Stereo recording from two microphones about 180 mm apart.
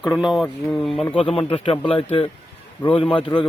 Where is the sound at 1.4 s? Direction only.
30° left (ahead or behind).